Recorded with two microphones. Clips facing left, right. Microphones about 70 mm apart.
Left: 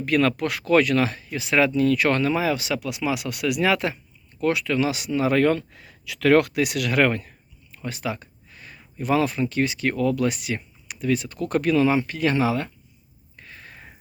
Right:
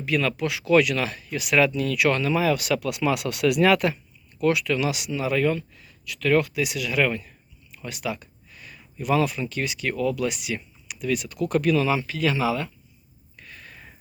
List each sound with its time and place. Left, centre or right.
0.0 s speech: left
2.4 s speech: left
2.7 s speech: centre
4.4 s speech: left
5.4 s speech: left
7.8 s speech: left
13.3 s a sound: left